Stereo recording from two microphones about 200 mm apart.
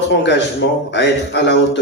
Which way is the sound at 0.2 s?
60° left (ahead or behind).